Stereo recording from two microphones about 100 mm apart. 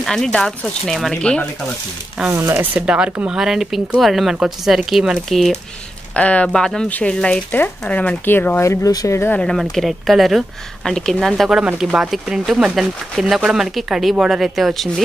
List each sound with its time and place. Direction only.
0.0 s speech: 5° left (ahead or behind)
2.3 s speech: 25° right (ahead or behind); by 5.5 s centre (ahead or behind)
6.1 s speech: 15° left (ahead or behind); by 9.2 s 35° left (ahead or behind)
9.4 s speech: 5° left (ahead or behind)